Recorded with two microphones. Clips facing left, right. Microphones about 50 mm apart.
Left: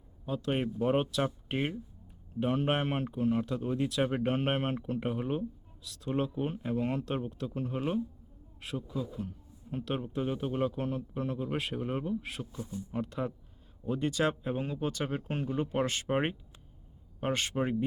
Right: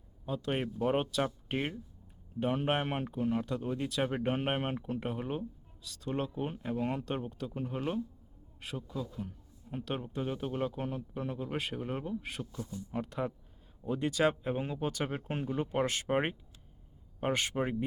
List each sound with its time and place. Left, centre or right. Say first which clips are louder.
0.3 s speech: left 2 dB; centre
9.2 s speech: left 2 dB; centre
12.5 s speech: left 2 dB; left
12.9 s speech: left 1 dB; centre